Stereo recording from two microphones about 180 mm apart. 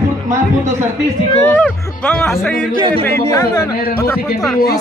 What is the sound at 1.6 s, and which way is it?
Speech, 10° left (ahead or behind).